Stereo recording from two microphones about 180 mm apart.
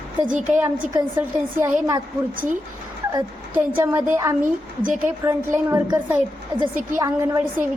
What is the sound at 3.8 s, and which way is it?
A woman's voice, 10° right (ahead or behind).